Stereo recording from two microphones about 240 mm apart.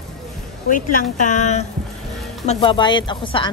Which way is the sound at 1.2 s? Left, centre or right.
Left.